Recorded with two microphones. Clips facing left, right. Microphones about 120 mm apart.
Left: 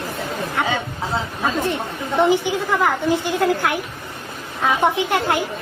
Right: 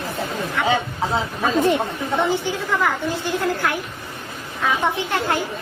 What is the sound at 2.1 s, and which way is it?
A woman's voice, 15° left (ahead or behind).